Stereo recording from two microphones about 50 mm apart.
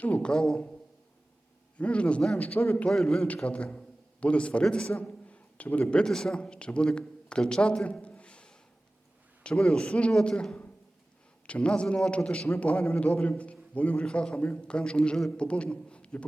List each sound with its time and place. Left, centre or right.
0.0 s a man's voice: left
1.8 s a man's voice: left
2.9 s a man's voice: centre
3.2 s a man's voice: left
5.8 s a man's voice: centre
11.4 s a man's voice: left